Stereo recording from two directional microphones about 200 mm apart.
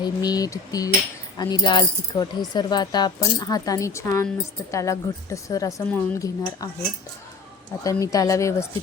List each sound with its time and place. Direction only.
0.0 s speech: 20° left (ahead or behind)
7.9 s speech: 15° left (ahead or behind)